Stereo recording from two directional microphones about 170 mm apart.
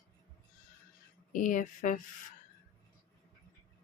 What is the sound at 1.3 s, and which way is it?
Speech, 50° left (ahead or behind).